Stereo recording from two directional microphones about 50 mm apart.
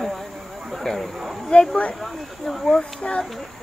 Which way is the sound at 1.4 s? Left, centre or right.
Centre.